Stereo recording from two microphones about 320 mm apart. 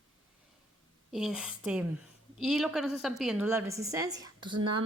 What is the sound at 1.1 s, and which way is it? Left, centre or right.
A woman's voice, centre.